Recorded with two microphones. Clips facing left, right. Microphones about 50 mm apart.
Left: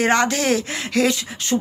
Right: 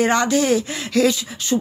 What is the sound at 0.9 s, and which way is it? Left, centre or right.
Speech, left.